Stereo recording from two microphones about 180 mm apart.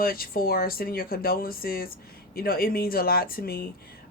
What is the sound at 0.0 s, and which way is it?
Speech, 55° left (ahead or behind).